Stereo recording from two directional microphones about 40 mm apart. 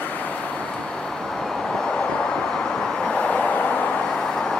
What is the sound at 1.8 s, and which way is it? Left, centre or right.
Vehicle, centre.